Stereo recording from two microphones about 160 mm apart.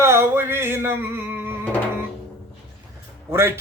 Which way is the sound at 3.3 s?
15° right (ahead or behind).